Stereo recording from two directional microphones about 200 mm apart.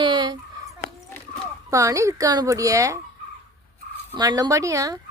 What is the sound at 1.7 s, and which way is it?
A woman's voice, 15° right (ahead or behind).